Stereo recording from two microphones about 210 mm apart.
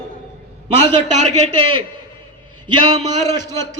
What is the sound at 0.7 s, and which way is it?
A man's voice, 30° right (ahead or behind).